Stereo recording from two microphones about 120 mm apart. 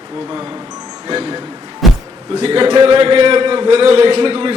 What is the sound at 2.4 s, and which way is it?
A man's voice, 45° right (ahead or behind).